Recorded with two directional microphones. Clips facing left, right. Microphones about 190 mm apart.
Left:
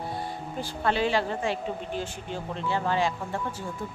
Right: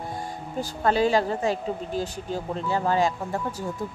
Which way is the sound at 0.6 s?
40° right (ahead or behind).